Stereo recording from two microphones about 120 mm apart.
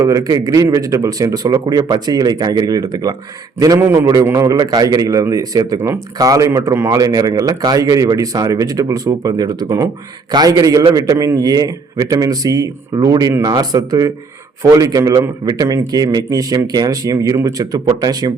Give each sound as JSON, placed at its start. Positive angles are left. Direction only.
{"t": 0.0, "sound": "a man's voice", "side_deg": -30}